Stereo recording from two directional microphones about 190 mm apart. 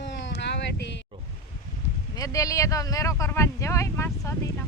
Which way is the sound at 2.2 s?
15° left (ahead or behind).